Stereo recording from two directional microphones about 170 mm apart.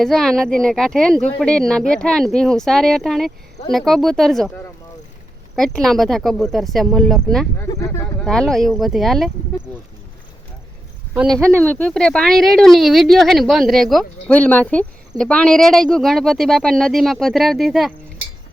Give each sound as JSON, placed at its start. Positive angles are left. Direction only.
{"t": 0.0, "sound": "speech", "side_deg": 0}
{"t": 5.5, "sound": "speech", "side_deg": 5}
{"t": 7.6, "sound": "speech", "side_deg": 20}
{"t": 8.2, "sound": "speech", "side_deg": 5}
{"t": 11.6, "sound": "speech", "side_deg": 10}